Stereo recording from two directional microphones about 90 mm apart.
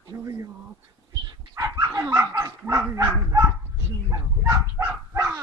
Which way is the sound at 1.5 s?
30° right (ahead or behind).